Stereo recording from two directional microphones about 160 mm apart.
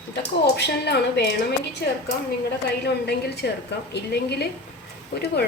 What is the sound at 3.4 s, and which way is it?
A woman's voice, 85° left.